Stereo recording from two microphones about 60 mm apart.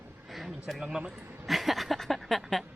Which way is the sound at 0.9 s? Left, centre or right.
Centre.